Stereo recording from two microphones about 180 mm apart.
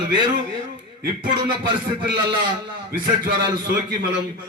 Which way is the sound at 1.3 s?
25° right (ahead or behind).